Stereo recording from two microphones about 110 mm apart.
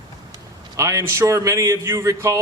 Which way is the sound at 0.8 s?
25° right (ahead or behind).